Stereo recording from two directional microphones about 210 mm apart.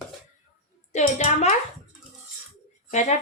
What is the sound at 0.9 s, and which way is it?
Speech, 35° left (ahead or behind).